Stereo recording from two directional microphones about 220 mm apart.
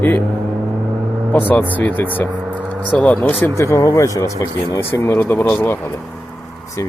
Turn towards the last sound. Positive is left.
turn(degrees=10)  # may be behind; listen again after turning